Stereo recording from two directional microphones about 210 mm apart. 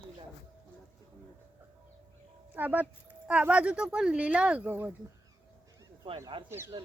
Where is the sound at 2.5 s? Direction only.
10° right (ahead or behind).